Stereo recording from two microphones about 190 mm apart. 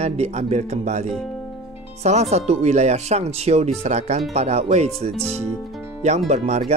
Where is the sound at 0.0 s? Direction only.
35° right (ahead or behind).